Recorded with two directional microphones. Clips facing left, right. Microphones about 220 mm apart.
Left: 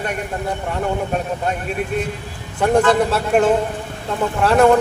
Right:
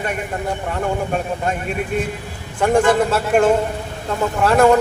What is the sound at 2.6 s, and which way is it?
Speech, centre (ahead or behind).